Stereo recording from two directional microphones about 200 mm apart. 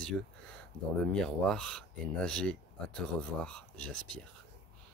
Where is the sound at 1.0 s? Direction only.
5° left (ahead or behind).